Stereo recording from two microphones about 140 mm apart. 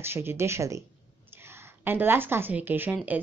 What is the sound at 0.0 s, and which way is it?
A woman's voice, 15° right (ahead or behind).